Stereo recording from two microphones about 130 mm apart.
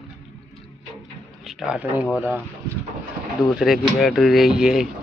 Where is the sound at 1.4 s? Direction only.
5° right (ahead or behind).